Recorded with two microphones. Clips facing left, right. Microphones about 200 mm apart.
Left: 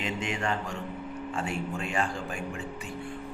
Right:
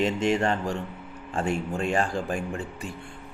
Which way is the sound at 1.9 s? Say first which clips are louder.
Right 5 dB; 35° right (ahead or behind).